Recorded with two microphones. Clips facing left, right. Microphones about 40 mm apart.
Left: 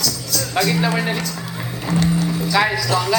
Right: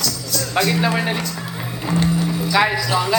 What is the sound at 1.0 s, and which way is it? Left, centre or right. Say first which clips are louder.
Speech: even; centre.